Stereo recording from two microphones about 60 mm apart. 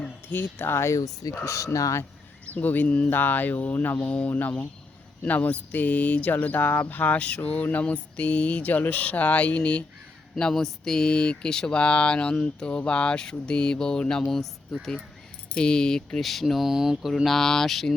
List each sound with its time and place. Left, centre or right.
0.3 s speech: left
2.5 s speech: left
10.3 s speech: centre
16.1 s speech: centre